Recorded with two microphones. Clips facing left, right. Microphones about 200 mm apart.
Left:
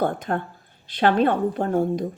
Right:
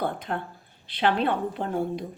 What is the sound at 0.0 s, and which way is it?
A woman's voice, 45° left (ahead or behind).